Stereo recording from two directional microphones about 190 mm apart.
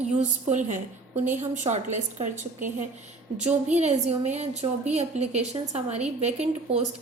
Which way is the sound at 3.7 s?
35° right (ahead or behind).